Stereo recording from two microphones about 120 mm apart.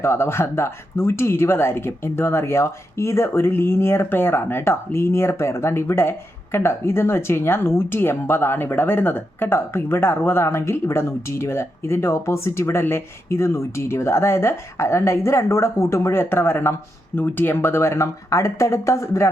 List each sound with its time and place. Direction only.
0.0 s speech: 20° left (ahead or behind)